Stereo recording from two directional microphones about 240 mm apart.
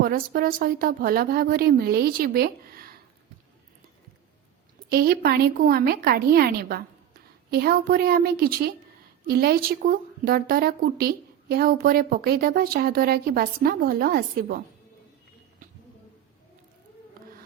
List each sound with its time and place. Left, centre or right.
0.0 s speech: right
4.9 s speech: right